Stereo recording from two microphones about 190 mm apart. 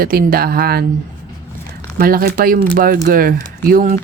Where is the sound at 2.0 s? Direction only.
50° right (ahead or behind).